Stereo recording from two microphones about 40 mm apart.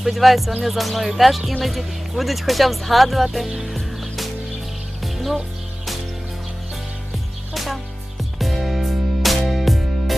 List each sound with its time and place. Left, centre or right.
0.0 s speech: centre
3.7 s music: centre
7.5 s music: centre